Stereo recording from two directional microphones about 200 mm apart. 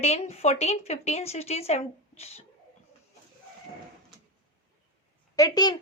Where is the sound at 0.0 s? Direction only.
30° left (ahead or behind).